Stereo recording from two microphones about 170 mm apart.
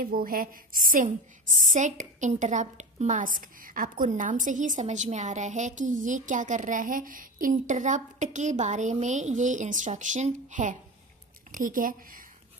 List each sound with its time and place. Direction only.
0.0 s a woman's voice: 55° right (ahead or behind)